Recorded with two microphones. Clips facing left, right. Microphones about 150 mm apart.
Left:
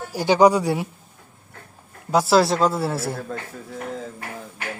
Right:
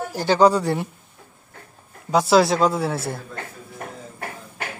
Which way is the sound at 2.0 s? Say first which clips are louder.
Right 1 dB; 5° left (ahead or behind).